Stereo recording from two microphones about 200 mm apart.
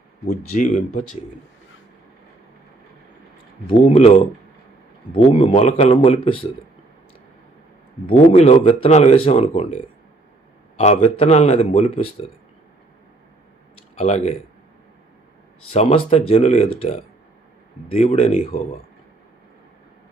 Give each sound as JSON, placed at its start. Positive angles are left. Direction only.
{"t": 0.3, "sound": "speech", "side_deg": 40}
{"t": 3.8, "sound": "speech", "side_deg": 30}
{"t": 5.1, "sound": "speech", "side_deg": 25}
{"t": 8.0, "sound": "speech", "side_deg": 30}
{"t": 10.8, "sound": "speech", "side_deg": 30}
{"t": 14.0, "sound": "speech", "side_deg": 35}
{"t": 15.7, "sound": "speech", "side_deg": 30}